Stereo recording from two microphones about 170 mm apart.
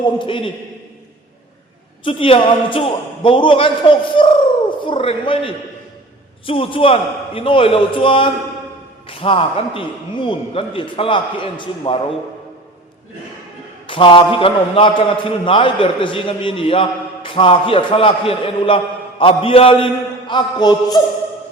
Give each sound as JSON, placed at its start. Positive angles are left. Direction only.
{"t": 0.0, "sound": "a man's voice", "side_deg": 30}
{"t": 2.0, "sound": "a man's voice", "side_deg": 30}
{"t": 13.8, "sound": "a man's voice", "side_deg": 30}